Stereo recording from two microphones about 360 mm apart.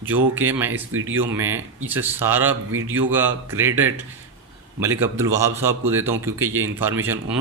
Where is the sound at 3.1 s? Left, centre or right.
Centre.